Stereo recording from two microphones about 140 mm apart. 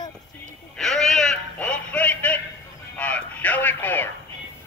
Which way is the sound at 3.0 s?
10° left (ahead or behind).